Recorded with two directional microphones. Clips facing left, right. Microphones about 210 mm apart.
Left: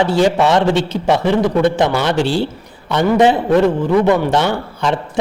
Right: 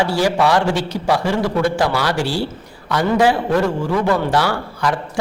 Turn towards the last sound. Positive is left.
turn(degrees=25)  # may be behind; listen again after turning